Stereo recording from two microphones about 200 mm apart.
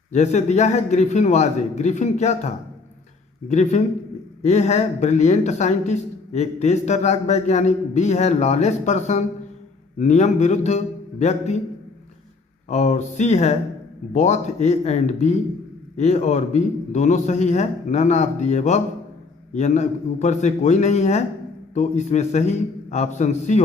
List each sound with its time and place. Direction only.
0.1 s speech: 35° left (ahead or behind)
12.6 s speech: 35° left (ahead or behind)